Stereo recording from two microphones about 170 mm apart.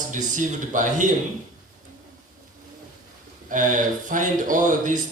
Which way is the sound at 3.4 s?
50° right (ahead or behind).